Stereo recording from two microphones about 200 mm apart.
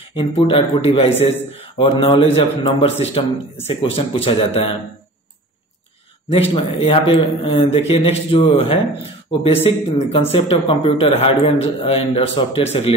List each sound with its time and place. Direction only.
0.1 s a man's voice: 25° left (ahead or behind)
6.5 s a man's voice: 25° left (ahead or behind)